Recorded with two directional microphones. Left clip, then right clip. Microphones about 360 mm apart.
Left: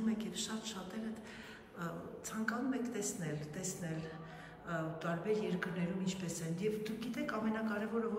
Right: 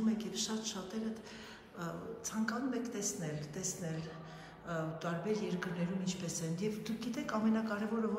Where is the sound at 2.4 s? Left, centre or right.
Centre.